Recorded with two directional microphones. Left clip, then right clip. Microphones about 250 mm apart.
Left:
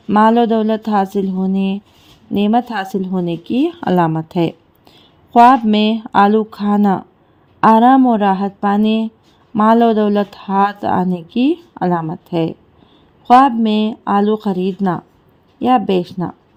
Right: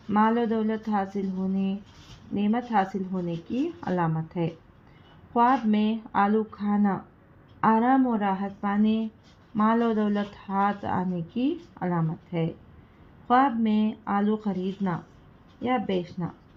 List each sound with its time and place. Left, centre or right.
0.1 s speech: left